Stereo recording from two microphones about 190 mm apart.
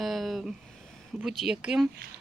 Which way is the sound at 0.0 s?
Centre (ahead or behind).